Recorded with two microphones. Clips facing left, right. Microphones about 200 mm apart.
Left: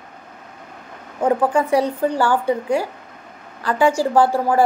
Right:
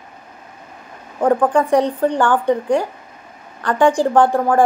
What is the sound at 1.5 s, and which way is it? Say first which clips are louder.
A woman's voice: right 2 dB; 10° left (ahead or behind).